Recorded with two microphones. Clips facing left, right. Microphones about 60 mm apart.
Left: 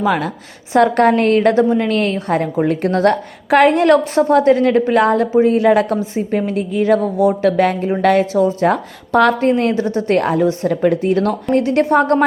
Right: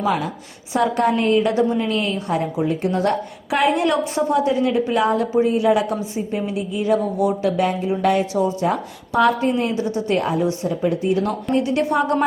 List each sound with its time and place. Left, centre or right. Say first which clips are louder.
0.0 s a woman's voice: left 4 dB; left
5.2 s a woman's voice: left 5 dB; left
7.2 s a sound: left 6 dB; left
7.5 s a woman's voice: left 5 dB; left
10.2 s a woman's voice: left 5 dB; left
11.5 s a woman's voice: left 6 dB; left